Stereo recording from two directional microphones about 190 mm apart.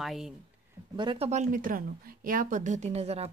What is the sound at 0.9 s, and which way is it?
Speech, 25° right (ahead or behind).